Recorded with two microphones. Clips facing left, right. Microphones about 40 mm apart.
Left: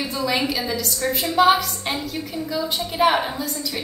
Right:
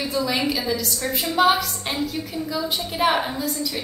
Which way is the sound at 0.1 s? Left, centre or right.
Centre.